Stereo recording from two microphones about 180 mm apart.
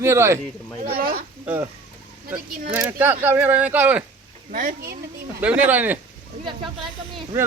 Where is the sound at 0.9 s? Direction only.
55° right (ahead or behind).